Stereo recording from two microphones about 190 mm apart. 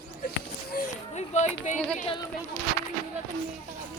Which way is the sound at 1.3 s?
40° left (ahead or behind).